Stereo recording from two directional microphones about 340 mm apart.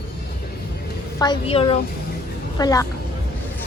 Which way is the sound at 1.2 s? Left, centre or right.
Centre.